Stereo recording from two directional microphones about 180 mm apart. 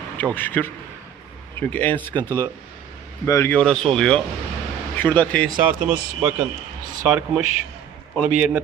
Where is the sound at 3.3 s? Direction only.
15° left (ahead or behind).